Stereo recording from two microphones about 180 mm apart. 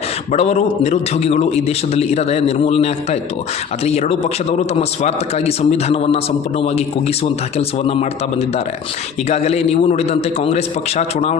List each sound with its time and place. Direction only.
0.3 s a man's voice: 35° left (ahead or behind)
7.9 s a man's voice: 35° left (ahead or behind)